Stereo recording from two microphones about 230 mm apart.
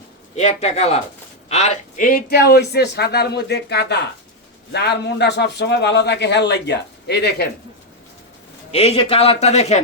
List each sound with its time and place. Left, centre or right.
0.3 s a man's voice: left
8.7 s a man's voice: left